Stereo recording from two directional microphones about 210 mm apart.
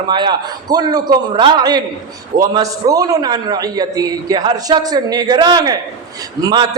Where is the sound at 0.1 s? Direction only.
20° right (ahead or behind).